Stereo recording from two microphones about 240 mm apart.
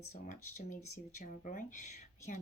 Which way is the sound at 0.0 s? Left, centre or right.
Left.